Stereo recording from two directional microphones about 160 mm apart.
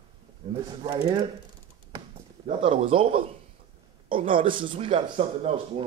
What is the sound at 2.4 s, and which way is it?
Speech, 35° right (ahead or behind).